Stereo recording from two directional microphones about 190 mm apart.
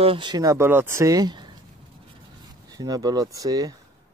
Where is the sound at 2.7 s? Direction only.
20° right (ahead or behind).